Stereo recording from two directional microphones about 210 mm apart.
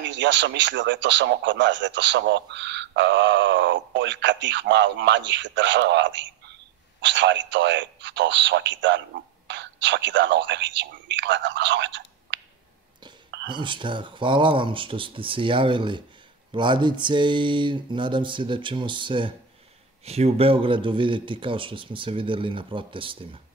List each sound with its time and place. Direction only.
0.0 s a man's voice: 60° right (ahead or behind)
12.3 s a sound: 60° right (ahead or behind)
13.5 s speech: 20° right (ahead or behind)